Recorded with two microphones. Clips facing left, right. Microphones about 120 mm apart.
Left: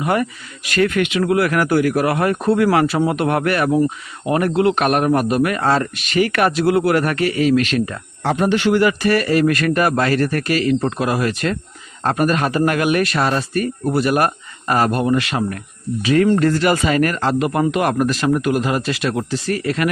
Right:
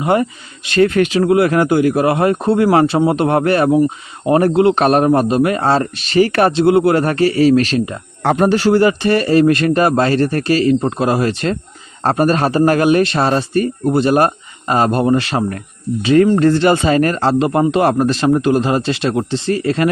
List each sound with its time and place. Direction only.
0.0 s a man's voice: 25° right (ahead or behind)
8.2 s speech: 55° right (ahead or behind)
8.4 s a man's voice: 35° right (ahead or behind)